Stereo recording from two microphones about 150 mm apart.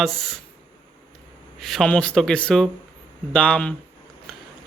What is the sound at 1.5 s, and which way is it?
Speech, centre (ahead or behind).